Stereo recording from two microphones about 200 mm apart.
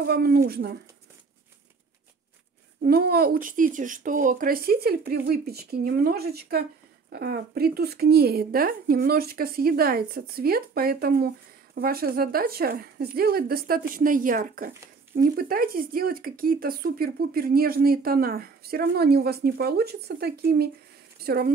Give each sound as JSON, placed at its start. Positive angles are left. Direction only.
{"t": 0.0, "sound": "speech", "side_deg": -50}
{"t": 2.8, "sound": "a woman's voice", "side_deg": -50}